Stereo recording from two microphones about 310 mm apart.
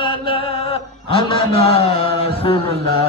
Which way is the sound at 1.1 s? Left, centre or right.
Centre.